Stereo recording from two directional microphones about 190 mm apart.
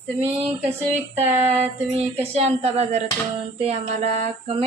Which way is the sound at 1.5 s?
30° right (ahead or behind).